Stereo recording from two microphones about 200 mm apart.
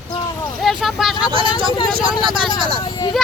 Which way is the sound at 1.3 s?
25° right (ahead or behind).